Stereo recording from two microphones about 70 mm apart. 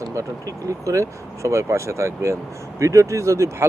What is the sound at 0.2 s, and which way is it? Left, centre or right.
Speech, right.